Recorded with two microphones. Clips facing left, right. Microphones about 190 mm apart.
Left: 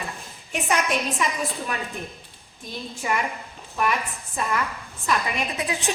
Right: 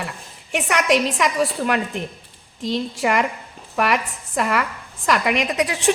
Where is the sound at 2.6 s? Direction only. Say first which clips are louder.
Right 8 dB; 90° right.